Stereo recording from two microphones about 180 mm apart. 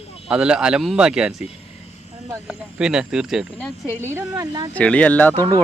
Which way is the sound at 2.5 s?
5° right (ahead or behind).